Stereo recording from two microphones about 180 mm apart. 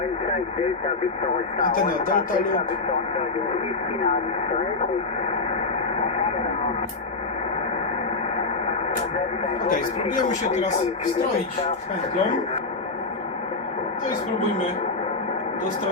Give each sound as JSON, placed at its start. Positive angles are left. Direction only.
{"t": 1.6, "sound": "speech", "side_deg": 50}
{"t": 9.6, "sound": "speech", "side_deg": 45}